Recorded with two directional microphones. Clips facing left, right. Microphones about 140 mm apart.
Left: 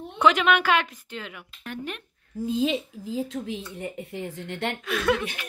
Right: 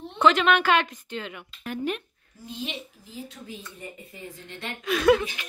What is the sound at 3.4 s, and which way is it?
A woman's voice, 85° left.